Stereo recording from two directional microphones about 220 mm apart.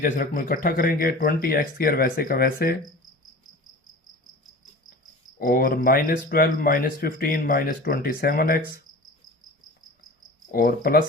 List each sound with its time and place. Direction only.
0.0 s speech: 40° left (ahead or behind)
5.4 s speech: 40° left (ahead or behind)
10.5 s speech: 40° left (ahead or behind)